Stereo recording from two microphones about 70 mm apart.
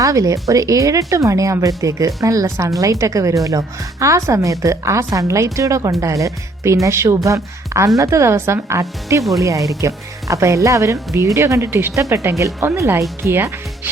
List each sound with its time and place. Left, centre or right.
0.0 s a woman's voice: right